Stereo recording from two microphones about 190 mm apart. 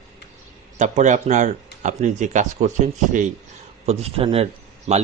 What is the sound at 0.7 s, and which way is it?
Speech, 40° right (ahead or behind).